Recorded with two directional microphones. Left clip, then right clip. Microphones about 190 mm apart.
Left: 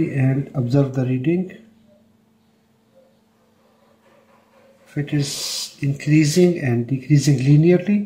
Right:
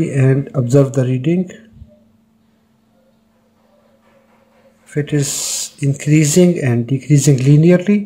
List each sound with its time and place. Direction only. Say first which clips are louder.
0.1 s speech: right 7 dB; 40° right (ahead or behind)
4.8 s speech: right 6 dB; 45° right (ahead or behind)